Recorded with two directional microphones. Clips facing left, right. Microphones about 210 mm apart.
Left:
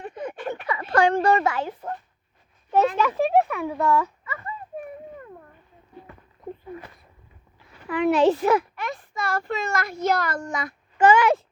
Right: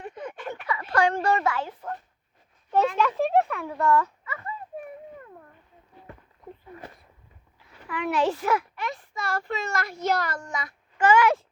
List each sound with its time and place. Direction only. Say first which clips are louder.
0.5 s a sound: left 3 dB; 20° left (ahead or behind)
2.7 s a child's voice: left 2 dB; 5° left (ahead or behind)
7.9 s a child's voice: left 7 dB; 25° left (ahead or behind)
8.7 s a child's voice: left 2 dB; 50° left (ahead or behind)
10.9 s a child's voice: left 3 dB; 20° left (ahead or behind)